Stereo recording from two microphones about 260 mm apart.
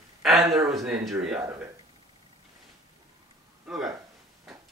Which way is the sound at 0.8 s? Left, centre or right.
Centre.